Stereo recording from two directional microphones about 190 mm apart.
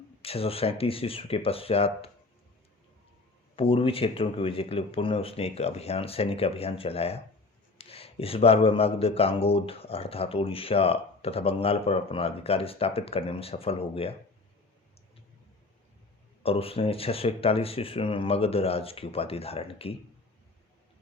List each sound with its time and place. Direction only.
0.2 s speech: 30° left (ahead or behind)
3.5 s speech: 30° left (ahead or behind)
16.4 s speech: 30° left (ahead or behind)